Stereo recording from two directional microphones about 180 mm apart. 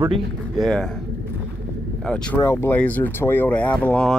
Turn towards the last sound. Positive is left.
turn(degrees=5)  # may be behind; listen again after turning